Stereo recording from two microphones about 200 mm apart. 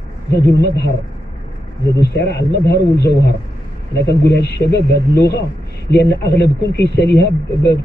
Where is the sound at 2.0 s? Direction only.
55° left (ahead or behind).